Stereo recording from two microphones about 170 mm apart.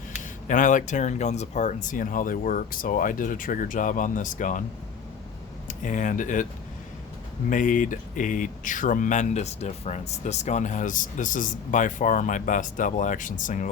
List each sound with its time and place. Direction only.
0.4 s speech: 50° left (ahead or behind)
5.6 s speech: 50° left (ahead or behind)
7.5 s speech: 50° left (ahead or behind)